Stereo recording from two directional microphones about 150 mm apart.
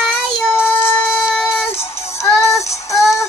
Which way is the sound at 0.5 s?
15° left (ahead or behind).